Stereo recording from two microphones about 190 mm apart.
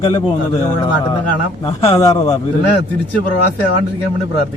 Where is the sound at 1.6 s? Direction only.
25° left (ahead or behind).